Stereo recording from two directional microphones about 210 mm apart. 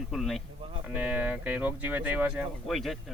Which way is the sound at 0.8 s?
5° right (ahead or behind).